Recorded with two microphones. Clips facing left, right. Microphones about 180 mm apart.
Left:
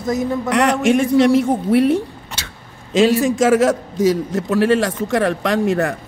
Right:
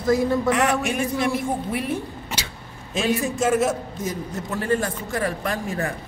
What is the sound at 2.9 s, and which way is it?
A man's voice, 90° left.